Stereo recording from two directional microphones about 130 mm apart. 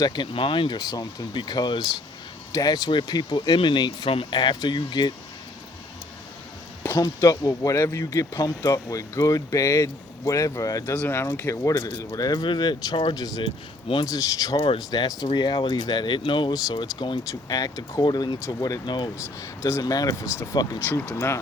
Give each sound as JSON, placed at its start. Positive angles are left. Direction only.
{"t": 0.0, "sound": "speech", "side_deg": 35}
{"t": 6.9, "sound": "speech", "side_deg": 30}
{"t": 10.9, "sound": "speech", "side_deg": 15}
{"t": 14.5, "sound": "speech", "side_deg": 40}
{"t": 19.1, "sound": "speech", "side_deg": 20}
{"t": 20.8, "sound": "speech", "side_deg": 15}